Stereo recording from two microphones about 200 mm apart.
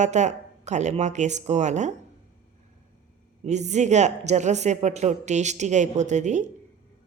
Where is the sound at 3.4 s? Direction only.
35° right (ahead or behind).